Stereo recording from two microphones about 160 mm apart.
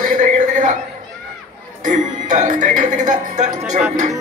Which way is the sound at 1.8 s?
50° right (ahead or behind).